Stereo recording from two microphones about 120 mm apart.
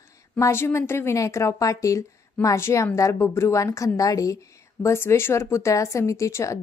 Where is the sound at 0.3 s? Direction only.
25° left (ahead or behind).